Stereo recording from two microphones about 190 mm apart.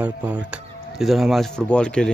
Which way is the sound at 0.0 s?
5° right (ahead or behind).